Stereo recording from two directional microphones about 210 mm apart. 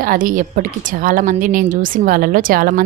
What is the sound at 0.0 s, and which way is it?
A woman's voice, 40° right (ahead or behind).